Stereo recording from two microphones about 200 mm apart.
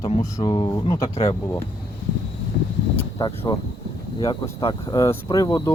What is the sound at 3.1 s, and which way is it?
Speech, 20° left (ahead or behind).